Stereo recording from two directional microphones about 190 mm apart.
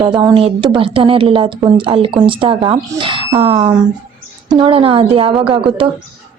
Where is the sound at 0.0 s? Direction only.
20° right (ahead or behind).